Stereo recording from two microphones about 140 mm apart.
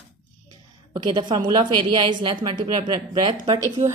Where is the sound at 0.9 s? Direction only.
30° right (ahead or behind).